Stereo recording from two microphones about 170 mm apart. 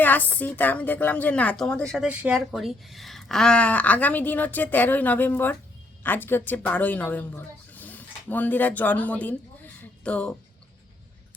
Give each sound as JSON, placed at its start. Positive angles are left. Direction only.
{"t": 0.0, "sound": "speech", "side_deg": 10}